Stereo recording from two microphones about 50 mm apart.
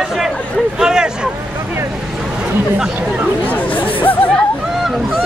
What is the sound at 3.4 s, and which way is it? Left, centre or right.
Chatter, left.